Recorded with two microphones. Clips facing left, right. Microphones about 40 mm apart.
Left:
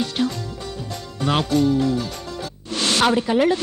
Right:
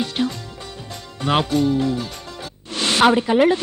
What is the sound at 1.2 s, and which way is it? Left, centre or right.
Speech, right.